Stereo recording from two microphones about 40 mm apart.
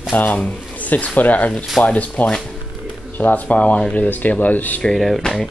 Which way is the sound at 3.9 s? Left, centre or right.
Left.